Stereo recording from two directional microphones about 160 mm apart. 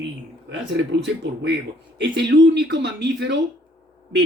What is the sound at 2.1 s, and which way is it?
Speech, 90° right.